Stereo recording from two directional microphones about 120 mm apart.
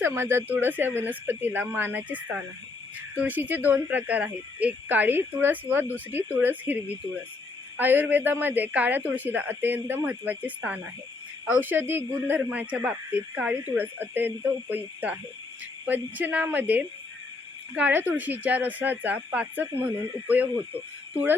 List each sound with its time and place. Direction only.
0.0 s a man's voice: 20° right (ahead or behind)